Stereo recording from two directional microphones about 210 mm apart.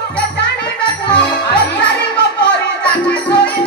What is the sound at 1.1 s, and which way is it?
Music, 5° left (ahead or behind).